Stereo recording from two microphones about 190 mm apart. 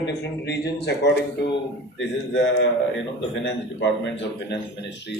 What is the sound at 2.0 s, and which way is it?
A man's voice, 75° left (ahead or behind).